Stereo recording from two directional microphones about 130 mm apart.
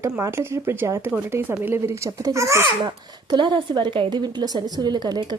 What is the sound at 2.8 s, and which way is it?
A woman's voice, 35° right (ahead or behind).